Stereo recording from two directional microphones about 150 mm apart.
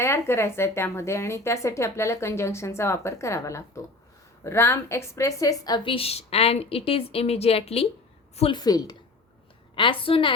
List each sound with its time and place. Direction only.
0.0 s a woman's voice: 15° left (ahead or behind); by 7.9 s 40° left (ahead or behind)
8.4 s a woman's voice: 30° left (ahead or behind)